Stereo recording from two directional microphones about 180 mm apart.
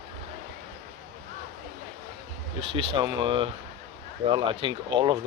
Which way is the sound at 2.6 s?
30° right (ahead or behind).